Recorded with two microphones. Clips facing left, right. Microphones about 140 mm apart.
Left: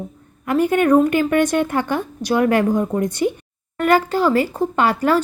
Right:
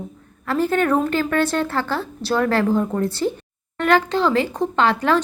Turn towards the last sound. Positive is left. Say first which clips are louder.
# left 1 dB
turn(degrees=10)  # may be behind; listen again after turning